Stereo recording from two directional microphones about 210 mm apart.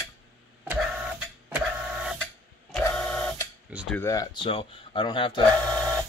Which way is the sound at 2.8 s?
15° left (ahead or behind).